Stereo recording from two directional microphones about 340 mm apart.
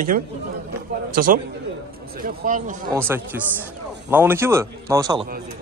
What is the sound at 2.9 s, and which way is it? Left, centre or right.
A man's voice, centre.